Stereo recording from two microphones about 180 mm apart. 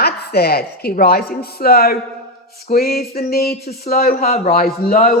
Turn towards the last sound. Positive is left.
turn(degrees=55)  # may be behind; listen again after turning